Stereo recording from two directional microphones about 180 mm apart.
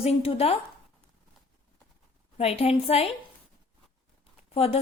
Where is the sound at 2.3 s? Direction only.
35° left (ahead or behind).